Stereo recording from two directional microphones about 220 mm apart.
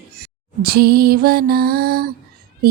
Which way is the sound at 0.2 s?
45° right (ahead or behind).